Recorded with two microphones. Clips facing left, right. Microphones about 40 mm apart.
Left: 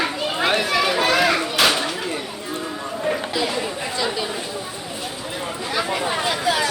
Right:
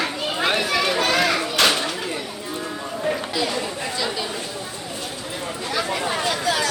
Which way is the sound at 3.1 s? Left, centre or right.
Centre.